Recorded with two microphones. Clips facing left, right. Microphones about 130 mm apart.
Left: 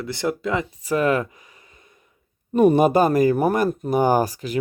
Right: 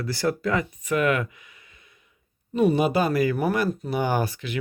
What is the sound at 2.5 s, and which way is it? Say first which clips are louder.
Speech: left 5 dB; 50° left (ahead or behind).